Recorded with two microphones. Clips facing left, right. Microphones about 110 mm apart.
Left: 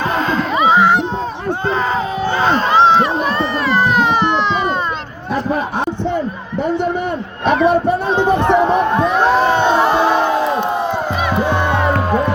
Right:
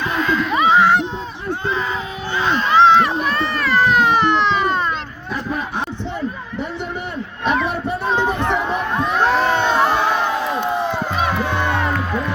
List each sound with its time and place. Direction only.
0.2 s snicker: 30° left (ahead or behind)
2.3 s a sound: 40° left (ahead or behind); by 4.0 s 20° left (ahead or behind)
7.4 s a sound: 50° left (ahead or behind)
8.1 s run: 20° left (ahead or behind)
9.1 s crowd: 15° left (ahead or behind)
10.3 s crowd: 35° left (ahead or behind)
11.3 s music: 20° left (ahead or behind)
11.9 s music: 45° left (ahead or behind)